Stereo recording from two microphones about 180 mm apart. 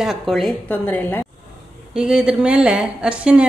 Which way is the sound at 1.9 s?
5° right (ahead or behind).